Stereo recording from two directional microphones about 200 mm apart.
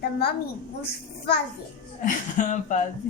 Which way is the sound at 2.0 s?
40° left (ahead or behind).